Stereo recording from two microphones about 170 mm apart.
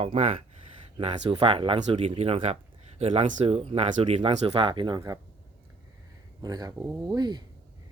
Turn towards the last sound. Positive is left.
turn(degrees=-25)  # may be behind; listen again after turning